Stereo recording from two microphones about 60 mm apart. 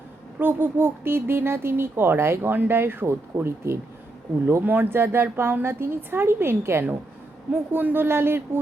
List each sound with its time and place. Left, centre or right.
0.3 s speech: right
4.6 s a woman's voice: right
7.5 s speech: right